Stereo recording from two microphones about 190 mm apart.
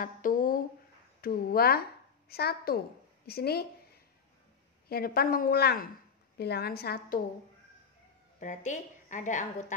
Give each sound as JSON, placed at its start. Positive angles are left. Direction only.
{"t": 0.0, "sound": "a sound", "side_deg": 45}
{"t": 1.2, "sound": "a woman's voice", "side_deg": 50}
{"t": 8.4, "sound": "a woman's voice", "side_deg": 40}